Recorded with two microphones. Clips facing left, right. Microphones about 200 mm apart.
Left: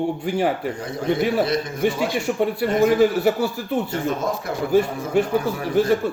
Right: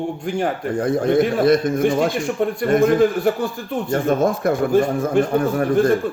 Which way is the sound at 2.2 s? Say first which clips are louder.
Right 1 dB; 5° left (ahead or behind).